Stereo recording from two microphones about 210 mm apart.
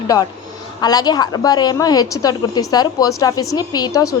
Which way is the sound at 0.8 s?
20° left (ahead or behind).